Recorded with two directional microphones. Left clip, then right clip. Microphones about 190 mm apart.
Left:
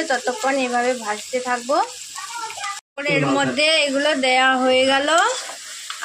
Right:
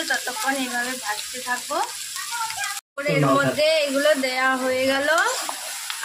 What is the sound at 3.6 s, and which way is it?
Speech, 35° left (ahead or behind).